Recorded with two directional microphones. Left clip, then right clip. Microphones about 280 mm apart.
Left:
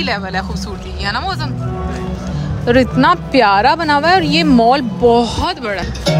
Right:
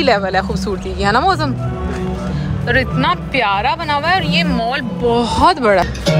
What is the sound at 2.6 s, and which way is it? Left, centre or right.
Speech, left.